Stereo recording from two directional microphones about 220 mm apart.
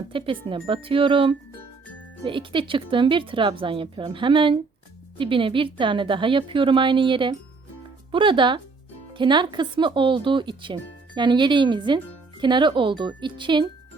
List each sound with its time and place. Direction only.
0.1 s speech: 25° right (ahead or behind)